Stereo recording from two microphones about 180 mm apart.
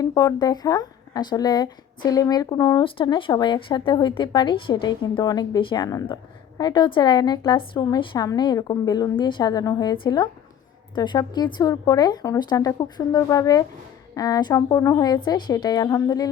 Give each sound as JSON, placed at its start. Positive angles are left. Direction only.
{"t": 0.0, "sound": "speech", "side_deg": 20}